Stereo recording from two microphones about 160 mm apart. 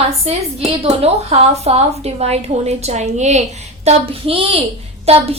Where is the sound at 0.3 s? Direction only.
35° right (ahead or behind).